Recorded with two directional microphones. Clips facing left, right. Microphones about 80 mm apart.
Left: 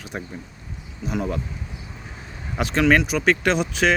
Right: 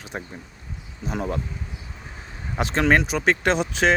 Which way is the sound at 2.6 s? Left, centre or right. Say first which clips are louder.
Left 1 dB; right.